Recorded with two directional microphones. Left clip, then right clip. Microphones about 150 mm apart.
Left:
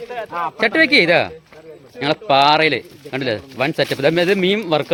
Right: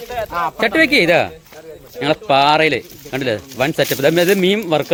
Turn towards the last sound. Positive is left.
turn(degrees=-5)  # may be behind; listen again after turning